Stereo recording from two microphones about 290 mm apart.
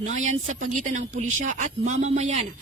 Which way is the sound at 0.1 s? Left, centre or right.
Right.